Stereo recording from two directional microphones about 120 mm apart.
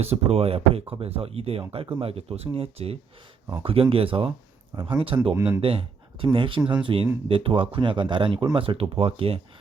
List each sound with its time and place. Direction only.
0.0 s a man's voice: 60° right (ahead or behind)
5.3 s speech: 15° right (ahead or behind)
5.5 s a man's voice: 50° right (ahead or behind)